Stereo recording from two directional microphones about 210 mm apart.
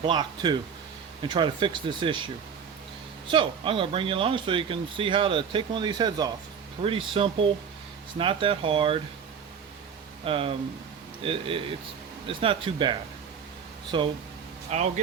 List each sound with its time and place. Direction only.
0.0 s speech: 20° right (ahead or behind)
10.2 s speech: 25° right (ahead or behind)
14.7 s speech: 35° right (ahead or behind)